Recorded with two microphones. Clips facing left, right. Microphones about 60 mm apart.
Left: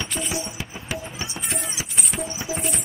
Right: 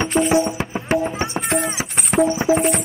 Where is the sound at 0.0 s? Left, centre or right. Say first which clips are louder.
Right 12 dB; right.